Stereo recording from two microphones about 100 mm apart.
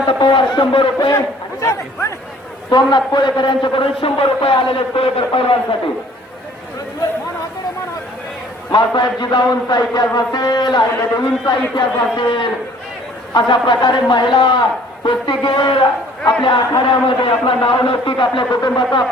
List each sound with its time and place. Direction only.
0.2 s a sound: 50° left (ahead or behind)
1.6 s speech: 30° left (ahead or behind)
2.6 s a man's voice: 45° left (ahead or behind)
8.7 s a man's voice: 50° left (ahead or behind)